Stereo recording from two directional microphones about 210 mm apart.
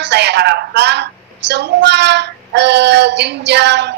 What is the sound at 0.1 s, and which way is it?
Speech, 55° right (ahead or behind).